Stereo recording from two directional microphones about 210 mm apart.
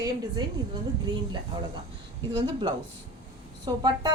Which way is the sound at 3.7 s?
20° right (ahead or behind).